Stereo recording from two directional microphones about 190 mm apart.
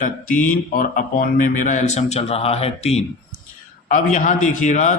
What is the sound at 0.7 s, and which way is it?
Speech, 50° left (ahead or behind).